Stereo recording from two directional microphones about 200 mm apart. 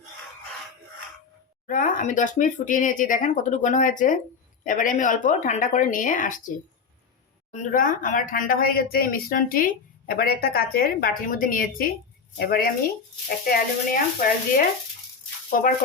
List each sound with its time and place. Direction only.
1.6 s speech: 40° left (ahead or behind)
7.5 s speech: 40° left (ahead or behind)
13.4 s speech: 45° left (ahead or behind)